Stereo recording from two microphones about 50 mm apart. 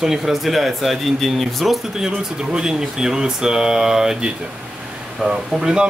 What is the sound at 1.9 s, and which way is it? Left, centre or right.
Speech, centre.